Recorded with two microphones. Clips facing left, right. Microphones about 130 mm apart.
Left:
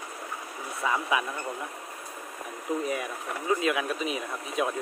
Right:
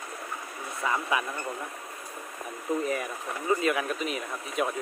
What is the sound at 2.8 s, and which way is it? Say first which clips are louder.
Speech: right 1 dB; 10° left (ahead or behind).